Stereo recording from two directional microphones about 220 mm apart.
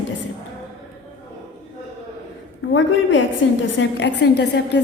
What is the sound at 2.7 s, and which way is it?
A woman's voice, 55° left (ahead or behind).